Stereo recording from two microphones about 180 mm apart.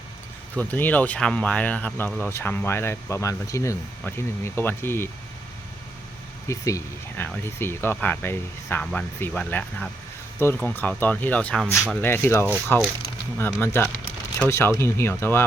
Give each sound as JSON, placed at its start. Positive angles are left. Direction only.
{"t": 0.5, "sound": "speech", "side_deg": 10}
{"t": 6.5, "sound": "speech", "side_deg": 15}